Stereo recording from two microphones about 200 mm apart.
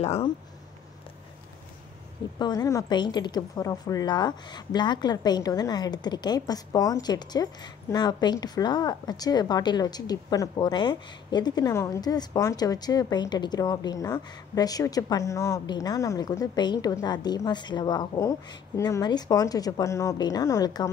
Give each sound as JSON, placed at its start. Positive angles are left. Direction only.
{"t": 0.0, "sound": "speech", "side_deg": 30}
{"t": 2.3, "sound": "speech", "side_deg": 20}